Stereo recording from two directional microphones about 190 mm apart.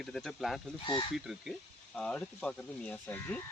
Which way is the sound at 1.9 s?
5° left (ahead or behind).